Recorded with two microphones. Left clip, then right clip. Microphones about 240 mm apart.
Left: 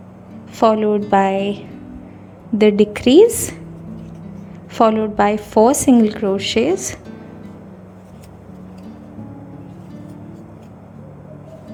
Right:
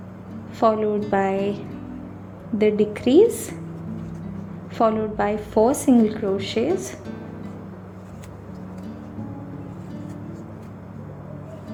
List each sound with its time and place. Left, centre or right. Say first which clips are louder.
0.6 s a woman's voice: left 5 dB; left
4.7 s a woman's voice: left 6 dB; left